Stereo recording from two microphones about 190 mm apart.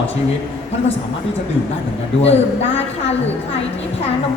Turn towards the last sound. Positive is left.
turn(degrees=35)  # may be behind; listen again after turning